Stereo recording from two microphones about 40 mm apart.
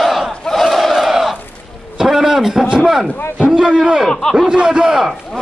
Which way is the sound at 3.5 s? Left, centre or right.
Centre.